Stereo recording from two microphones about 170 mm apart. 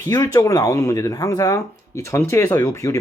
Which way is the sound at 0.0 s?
20° left (ahead or behind).